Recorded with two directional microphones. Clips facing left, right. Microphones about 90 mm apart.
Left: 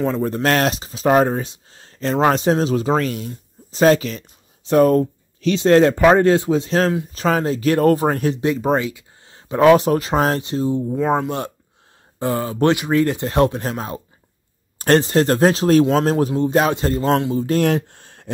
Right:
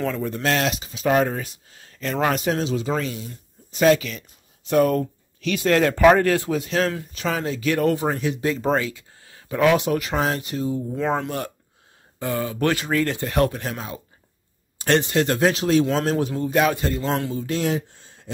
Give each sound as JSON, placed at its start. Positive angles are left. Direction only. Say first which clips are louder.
{"t": 0.2, "sound": "speech", "louder": "left 5 dB", "side_deg": 45}
{"t": 1.4, "sound": "speech", "louder": "left 4 dB", "side_deg": 30}
{"t": 7.1, "sound": "speech", "louder": "left 6 dB", "side_deg": 40}
{"t": 8.7, "sound": "a sound", "louder": "left 3 dB", "side_deg": 20}
{"t": 9.7, "sound": "speech", "louder": "left 7 dB", "side_deg": 35}
{"t": 10.4, "sound": "speech", "louder": "left 5 dB", "side_deg": 30}
{"t": 11.0, "sound": "speech", "louder": "left 4 dB", "side_deg": 10}
{"t": 11.2, "sound": "speech", "louder": "left 4 dB", "side_deg": 25}
{"t": 12.7, "sound": "speech", "louder": "left 5 dB", "side_deg": 15}
{"t": 16.3, "sound": "speech", "louder": "left 3 dB", "side_deg": 30}
{"t": 17.5, "sound": "speech", "louder": "left 6 dB", "side_deg": 55}